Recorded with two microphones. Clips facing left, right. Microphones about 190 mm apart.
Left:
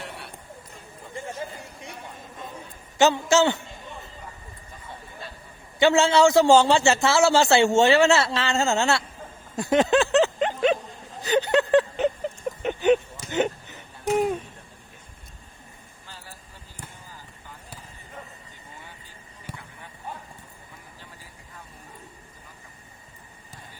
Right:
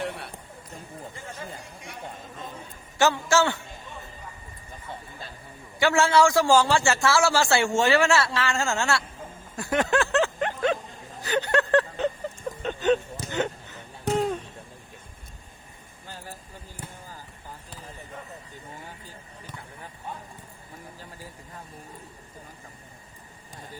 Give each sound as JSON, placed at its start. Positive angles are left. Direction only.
{"t": 3.0, "sound": "a man's voice", "side_deg": 20}
{"t": 5.8, "sound": "a man's voice", "side_deg": 20}
{"t": 9.6, "sound": "a sound", "side_deg": 20}
{"t": 12.5, "sound": "vehicle", "side_deg": 15}
{"t": 13.3, "sound": "a sound", "side_deg": 20}
{"t": 16.0, "sound": "vehicle", "side_deg": -50}